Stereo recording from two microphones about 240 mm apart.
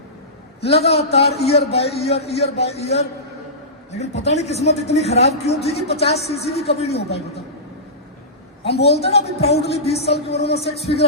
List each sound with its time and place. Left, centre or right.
0.7 s a man's voice: left
8.8 s a man's voice: left